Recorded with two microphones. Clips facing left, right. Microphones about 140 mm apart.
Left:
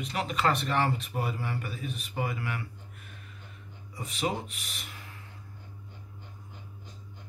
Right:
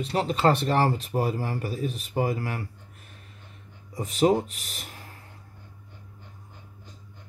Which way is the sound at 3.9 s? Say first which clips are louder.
Right 10 dB; 40° right (ahead or behind).